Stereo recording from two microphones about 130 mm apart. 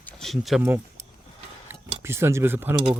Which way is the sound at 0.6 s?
15° right (ahead or behind).